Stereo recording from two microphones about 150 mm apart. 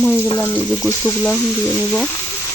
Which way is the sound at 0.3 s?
15° left (ahead or behind).